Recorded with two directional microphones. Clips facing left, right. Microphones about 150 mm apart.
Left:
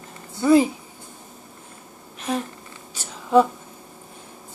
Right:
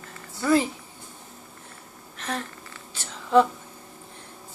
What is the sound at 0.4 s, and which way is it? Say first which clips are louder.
Speech: left 6 dB; 15° left (ahead or behind).